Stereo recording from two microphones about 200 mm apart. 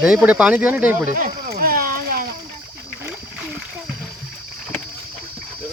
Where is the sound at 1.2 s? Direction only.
45° right (ahead or behind).